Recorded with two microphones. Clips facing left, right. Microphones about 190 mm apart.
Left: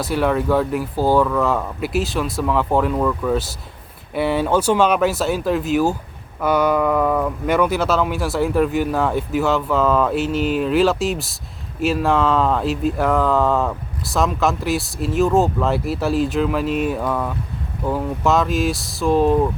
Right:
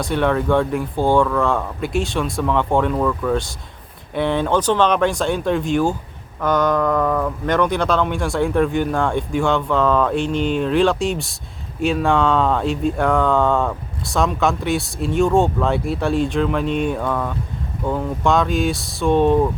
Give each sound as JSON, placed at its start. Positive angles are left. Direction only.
{"t": 0.0, "sound": "speech", "side_deg": 5}